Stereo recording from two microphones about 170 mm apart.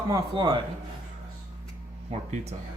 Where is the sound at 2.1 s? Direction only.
40° right (ahead or behind).